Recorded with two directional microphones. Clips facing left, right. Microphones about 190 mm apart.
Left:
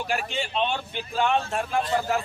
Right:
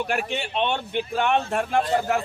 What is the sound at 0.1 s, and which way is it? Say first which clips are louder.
A man's voice: right 2 dB; 60° right (ahead or behind).